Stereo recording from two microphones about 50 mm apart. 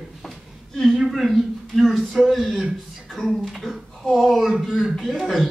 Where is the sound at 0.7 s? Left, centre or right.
Centre.